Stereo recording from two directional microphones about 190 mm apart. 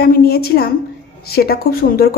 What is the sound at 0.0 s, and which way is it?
Speech, 50° left (ahead or behind).